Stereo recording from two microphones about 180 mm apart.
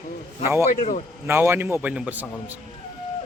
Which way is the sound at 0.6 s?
45° left (ahead or behind).